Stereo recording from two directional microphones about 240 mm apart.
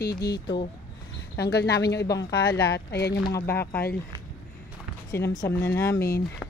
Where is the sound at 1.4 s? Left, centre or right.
Left.